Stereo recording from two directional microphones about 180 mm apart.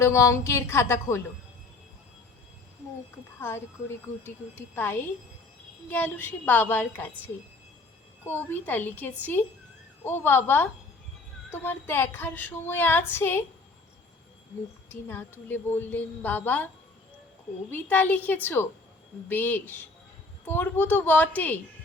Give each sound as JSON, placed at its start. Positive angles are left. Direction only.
{"t": 0.0, "sound": "speech", "side_deg": 15}
{"t": 3.4, "sound": "speech", "side_deg": 15}
{"t": 8.4, "sound": "speech", "side_deg": 10}
{"t": 14.8, "sound": "speech", "side_deg": 10}
{"t": 17.7, "sound": "speech", "side_deg": 10}